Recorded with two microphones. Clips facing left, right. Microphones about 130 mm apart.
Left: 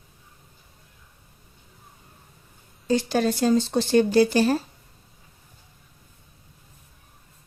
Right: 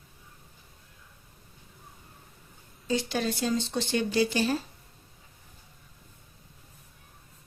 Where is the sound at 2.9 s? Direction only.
45° left (ahead or behind).